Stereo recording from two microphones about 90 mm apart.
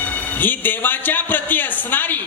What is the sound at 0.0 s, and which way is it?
A man's voice, 20° left (ahead or behind).